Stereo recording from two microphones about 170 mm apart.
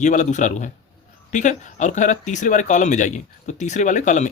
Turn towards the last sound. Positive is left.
turn(degrees=45)  # may be behind; listen again after turning